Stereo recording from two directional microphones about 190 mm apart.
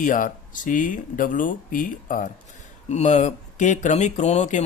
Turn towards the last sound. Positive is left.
turn(degrees=35)  # may be behind; listen again after turning